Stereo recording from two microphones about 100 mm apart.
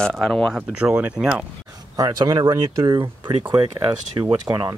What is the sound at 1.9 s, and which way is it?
Speech, 35° right (ahead or behind).